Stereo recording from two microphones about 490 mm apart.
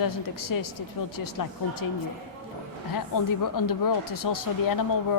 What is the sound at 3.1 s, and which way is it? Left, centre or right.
Speech, left.